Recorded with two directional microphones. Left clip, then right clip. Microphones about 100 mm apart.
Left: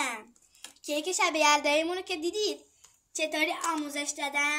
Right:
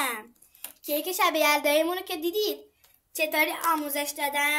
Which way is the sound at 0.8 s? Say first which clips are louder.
Right 3 dB; 25° right (ahead or behind).